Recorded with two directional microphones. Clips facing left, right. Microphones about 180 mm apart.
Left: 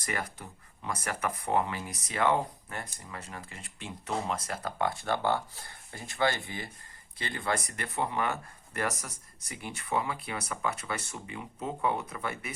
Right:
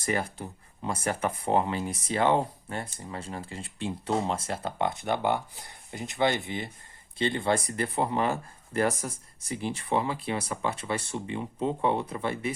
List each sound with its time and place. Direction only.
0.0 s speech: 30° right (ahead or behind)